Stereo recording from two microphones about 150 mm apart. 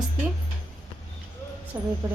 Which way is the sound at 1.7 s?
10° right (ahead or behind).